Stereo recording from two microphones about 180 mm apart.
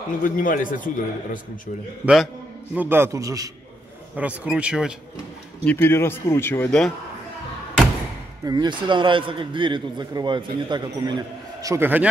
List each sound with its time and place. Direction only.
0.2 s a man's voice: 50° left (ahead or behind)
2.7 s a man's voice: 10° right (ahead or behind)
4.2 s speech: 5° right (ahead or behind)
5.7 s speech: 15° left (ahead or behind)
8.5 s a man's voice: 25° right (ahead or behind)